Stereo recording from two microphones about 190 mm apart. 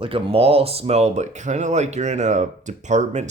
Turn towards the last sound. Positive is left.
turn(degrees=-40)  # may be behind; listen again after turning